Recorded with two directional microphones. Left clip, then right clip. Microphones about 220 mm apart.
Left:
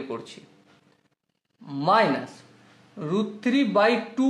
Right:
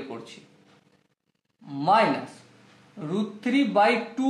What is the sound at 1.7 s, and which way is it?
A man's voice, 35° left (ahead or behind).